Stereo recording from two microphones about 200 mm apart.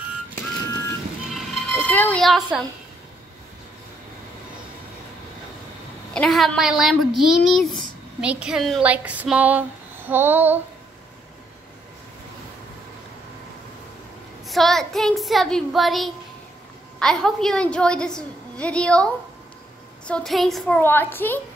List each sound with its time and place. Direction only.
0.7 s vehicle: 15° left (ahead or behind)
1.3 s music: 5° left (ahead or behind)
6.1 s a woman's voice: centre (ahead or behind)
14.4 s a woman's voice: centre (ahead or behind)